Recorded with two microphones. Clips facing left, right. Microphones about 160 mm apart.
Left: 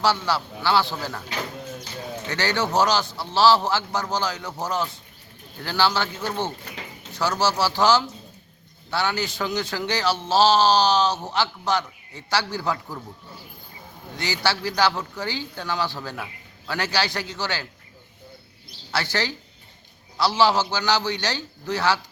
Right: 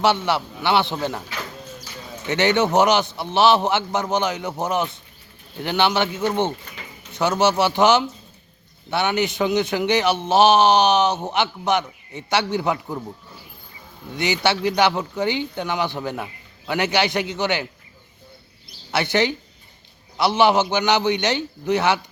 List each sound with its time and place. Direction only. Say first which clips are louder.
0.0 s a man's voice: right 3 dB; 20° right (ahead or behind)
2.2 s a man's voice: right 7 dB; 20° right (ahead or behind)
14.2 s a man's voice: right 5 dB; 20° right (ahead or behind)
18.9 s a man's voice: right 6 dB; 20° right (ahead or behind)